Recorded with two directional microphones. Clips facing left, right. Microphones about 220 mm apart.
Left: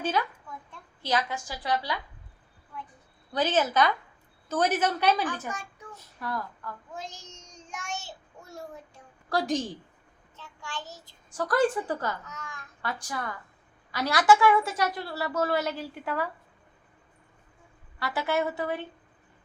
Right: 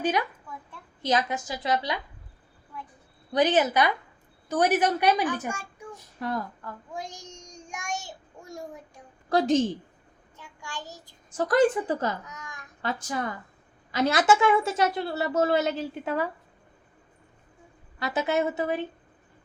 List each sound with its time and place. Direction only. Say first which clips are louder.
0.0 s a woman's voice: right 2 dB; 15° right (ahead or behind)
3.3 s a woman's voice: right 3 dB; 15° right (ahead or behind)
5.9 s child singing: right 4 dB; 20° right (ahead or behind)
9.3 s a woman's voice: right 6 dB; 25° right (ahead or behind)
18.0 s a woman's voice: right 3 dB; 20° right (ahead or behind)